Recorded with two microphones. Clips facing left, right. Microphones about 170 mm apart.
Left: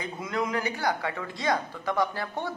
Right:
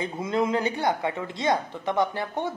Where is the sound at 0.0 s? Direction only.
25° right (ahead or behind).